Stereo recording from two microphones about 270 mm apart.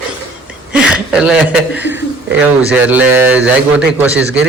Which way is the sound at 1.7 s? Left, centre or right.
Left.